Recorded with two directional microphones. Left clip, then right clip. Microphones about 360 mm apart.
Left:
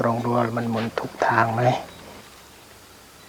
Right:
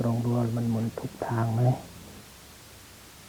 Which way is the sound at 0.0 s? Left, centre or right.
Centre.